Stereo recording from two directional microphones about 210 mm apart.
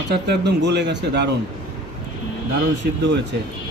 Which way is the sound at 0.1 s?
55° right (ahead or behind).